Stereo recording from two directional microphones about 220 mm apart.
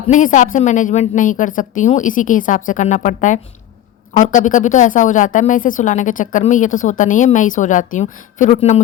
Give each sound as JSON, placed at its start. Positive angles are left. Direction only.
{"t": 0.1, "sound": "a woman's voice", "side_deg": 35}